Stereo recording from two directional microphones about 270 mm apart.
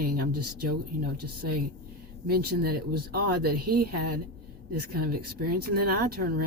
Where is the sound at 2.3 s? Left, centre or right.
Right.